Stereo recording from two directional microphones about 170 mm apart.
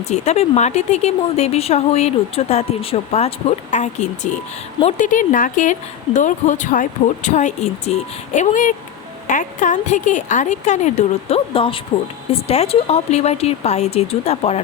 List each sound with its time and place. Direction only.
0.1 s a woman's voice: 40° left (ahead or behind)